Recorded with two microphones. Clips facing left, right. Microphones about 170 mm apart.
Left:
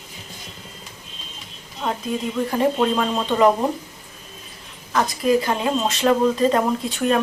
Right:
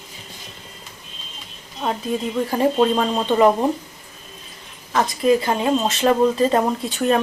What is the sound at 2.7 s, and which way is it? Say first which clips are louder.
Speech: right 2 dB; 25° right (ahead or behind).